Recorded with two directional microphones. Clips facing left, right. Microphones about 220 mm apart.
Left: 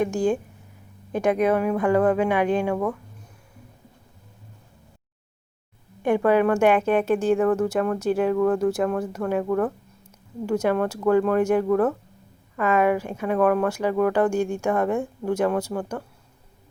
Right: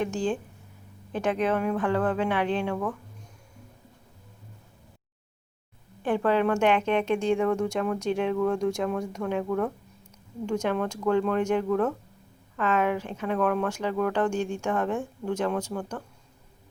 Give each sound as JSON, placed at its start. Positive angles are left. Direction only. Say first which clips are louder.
{"t": 0.0, "sound": "speech", "louder": "left 5 dB", "side_deg": 10}
{"t": 6.0, "sound": "speech", "louder": "left 5 dB", "side_deg": 10}